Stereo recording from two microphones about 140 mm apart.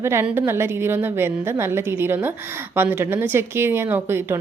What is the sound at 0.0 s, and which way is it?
A woman's voice, 20° right (ahead or behind).